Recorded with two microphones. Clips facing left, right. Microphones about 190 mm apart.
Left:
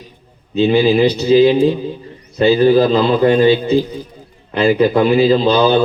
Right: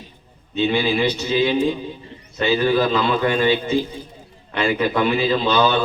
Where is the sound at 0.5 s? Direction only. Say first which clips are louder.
Left 8 dB; 35° left (ahead or behind).